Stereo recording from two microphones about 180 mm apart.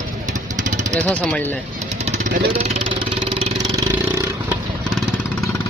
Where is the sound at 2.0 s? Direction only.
45° right (ahead or behind).